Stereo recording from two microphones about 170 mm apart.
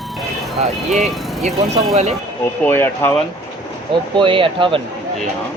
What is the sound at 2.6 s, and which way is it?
Speech, 15° left (ahead or behind).